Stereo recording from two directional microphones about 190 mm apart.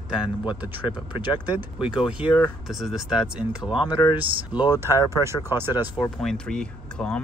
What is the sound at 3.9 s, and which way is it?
Speech, 25° left (ahead or behind).